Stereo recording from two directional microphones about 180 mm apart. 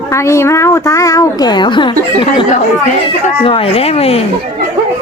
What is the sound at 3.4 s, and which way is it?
Speech, 30° left (ahead or behind).